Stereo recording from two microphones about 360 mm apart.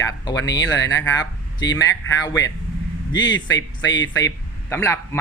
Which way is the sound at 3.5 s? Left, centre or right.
Left.